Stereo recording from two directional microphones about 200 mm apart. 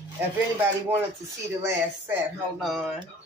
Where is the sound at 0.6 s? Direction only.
10° right (ahead or behind).